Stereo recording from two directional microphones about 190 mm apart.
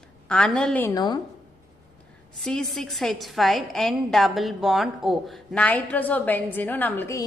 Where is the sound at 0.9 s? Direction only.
20° left (ahead or behind).